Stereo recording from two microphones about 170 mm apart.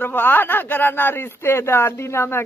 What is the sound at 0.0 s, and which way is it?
A man's voice, 10° left (ahead or behind).